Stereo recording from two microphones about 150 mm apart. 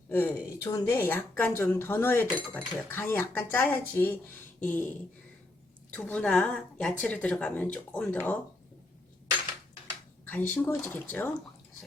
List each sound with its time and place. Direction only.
0.1 s speech: 15° left (ahead or behind)
5.9 s speech: 10° left (ahead or behind)
10.2 s speech: 10° left (ahead or behind)